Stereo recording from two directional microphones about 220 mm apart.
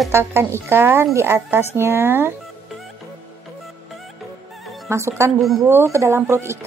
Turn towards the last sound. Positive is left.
turn(degrees=-10)  # may be behind; listen again after turning